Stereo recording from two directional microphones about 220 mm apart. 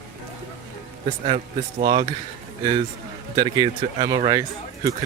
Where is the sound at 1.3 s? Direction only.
25° right (ahead or behind).